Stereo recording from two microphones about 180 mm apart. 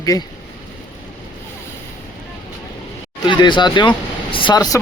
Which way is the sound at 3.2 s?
25° left (ahead or behind).